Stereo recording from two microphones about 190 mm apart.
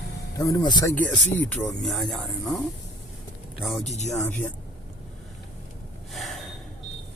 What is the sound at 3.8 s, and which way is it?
Speech, 35° left (ahead or behind).